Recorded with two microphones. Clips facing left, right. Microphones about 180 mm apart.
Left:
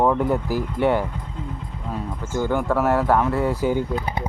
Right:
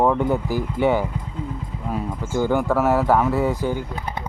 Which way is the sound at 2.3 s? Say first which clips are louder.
Right 2 dB; 10° right (ahead or behind).